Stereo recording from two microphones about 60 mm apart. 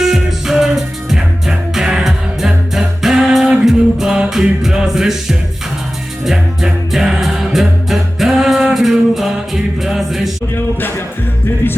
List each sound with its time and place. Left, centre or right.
0.0 s music: centre
10.5 s a capella: left
11.6 s music: left